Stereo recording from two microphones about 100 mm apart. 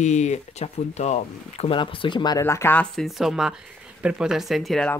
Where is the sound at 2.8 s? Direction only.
5° left (ahead or behind).